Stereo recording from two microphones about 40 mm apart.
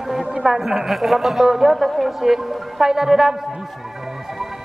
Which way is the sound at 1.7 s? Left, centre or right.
Centre.